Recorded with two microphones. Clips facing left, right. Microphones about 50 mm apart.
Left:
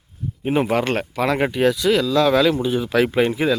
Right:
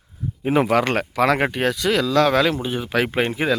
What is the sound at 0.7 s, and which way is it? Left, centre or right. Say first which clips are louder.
Speech: right 1 dB; right.